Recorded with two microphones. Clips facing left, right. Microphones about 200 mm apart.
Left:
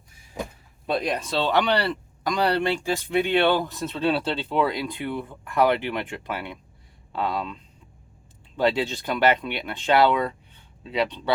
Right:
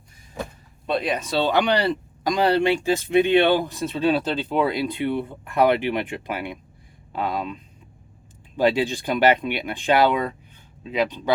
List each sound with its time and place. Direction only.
0.9 s speech: centre (ahead or behind); by 10.3 s 15° right (ahead or behind)